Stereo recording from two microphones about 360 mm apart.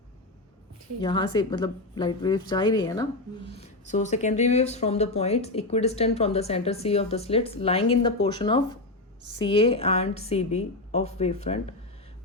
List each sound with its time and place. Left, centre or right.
1.0 s speech: centre